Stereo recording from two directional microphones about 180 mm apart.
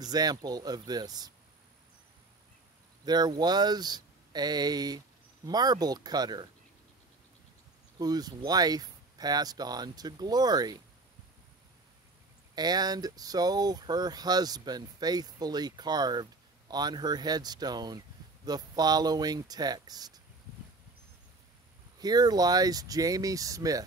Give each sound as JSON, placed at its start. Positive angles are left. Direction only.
{"t": 0.0, "sound": "speech", "side_deg": -20}
{"t": 3.1, "sound": "speech", "side_deg": -25}
{"t": 8.0, "sound": "speech", "side_deg": -20}
{"t": 12.5, "sound": "speech", "side_deg": -20}
{"t": 21.9, "sound": "speech", "side_deg": -20}